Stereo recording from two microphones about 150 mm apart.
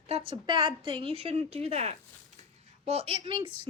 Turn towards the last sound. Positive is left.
turn(degrees=-35)  # may be behind; listen again after turning